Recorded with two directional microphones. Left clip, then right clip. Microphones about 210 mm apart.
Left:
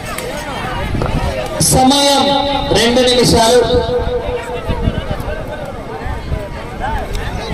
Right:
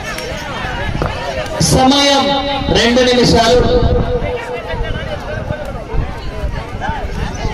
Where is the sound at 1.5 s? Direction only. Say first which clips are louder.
Even; 55° left (ahead or behind).